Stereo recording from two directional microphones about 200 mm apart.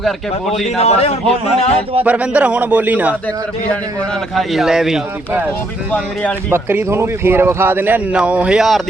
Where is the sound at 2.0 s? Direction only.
5° right (ahead or behind).